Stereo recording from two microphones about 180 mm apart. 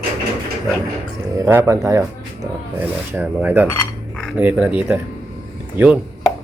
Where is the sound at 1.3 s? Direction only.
10° right (ahead or behind).